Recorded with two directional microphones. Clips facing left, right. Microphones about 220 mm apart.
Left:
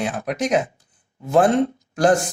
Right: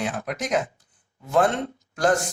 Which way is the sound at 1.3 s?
15° left (ahead or behind).